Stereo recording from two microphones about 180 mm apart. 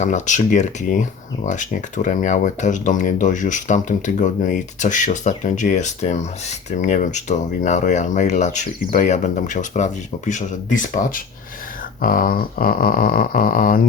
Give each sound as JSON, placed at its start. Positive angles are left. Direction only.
{"t": 0.0, "sound": "speech", "side_deg": 40}